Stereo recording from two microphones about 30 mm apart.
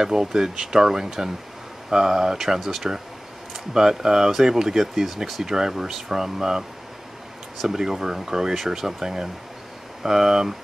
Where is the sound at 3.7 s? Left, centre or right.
Centre.